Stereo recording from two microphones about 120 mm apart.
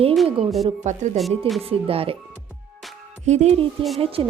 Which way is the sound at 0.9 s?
80° right.